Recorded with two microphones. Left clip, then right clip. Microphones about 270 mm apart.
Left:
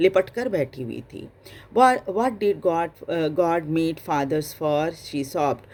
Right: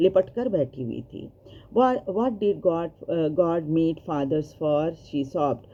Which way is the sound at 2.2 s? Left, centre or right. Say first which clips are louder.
Left 2 dB; left.